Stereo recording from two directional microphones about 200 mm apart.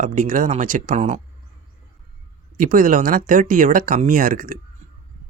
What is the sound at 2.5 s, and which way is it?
Speech, 45° right (ahead or behind).